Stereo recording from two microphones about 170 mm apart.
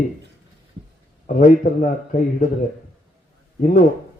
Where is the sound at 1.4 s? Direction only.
50° left (ahead or behind).